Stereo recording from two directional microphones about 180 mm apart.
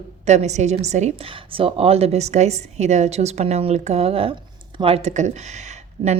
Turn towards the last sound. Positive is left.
turn(degrees=-30)  # may be behind; listen again after turning